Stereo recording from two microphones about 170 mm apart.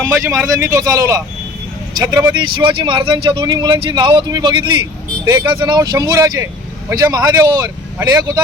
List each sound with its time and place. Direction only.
0.3 s a man's voice: 15° right (ahead or behind)